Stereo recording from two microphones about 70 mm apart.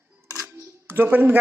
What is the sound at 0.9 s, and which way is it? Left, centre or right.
Speech, right.